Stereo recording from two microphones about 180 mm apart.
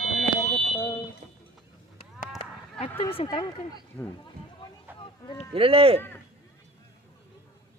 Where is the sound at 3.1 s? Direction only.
30° left (ahead or behind).